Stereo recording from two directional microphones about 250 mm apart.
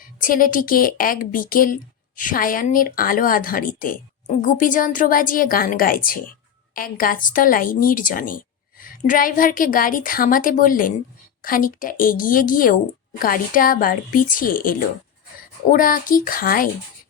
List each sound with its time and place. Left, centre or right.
0.0 s speech: left